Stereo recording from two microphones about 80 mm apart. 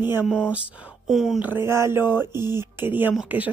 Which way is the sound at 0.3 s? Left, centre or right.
Centre.